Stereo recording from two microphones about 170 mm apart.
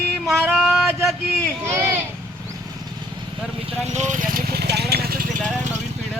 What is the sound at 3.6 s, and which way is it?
Vehicle, 40° right (ahead or behind).